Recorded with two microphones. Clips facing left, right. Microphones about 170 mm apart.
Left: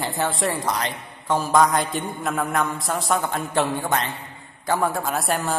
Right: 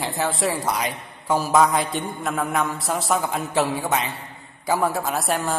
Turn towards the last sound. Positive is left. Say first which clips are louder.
# even
turn(degrees=0)  # may be behind; listen again after turning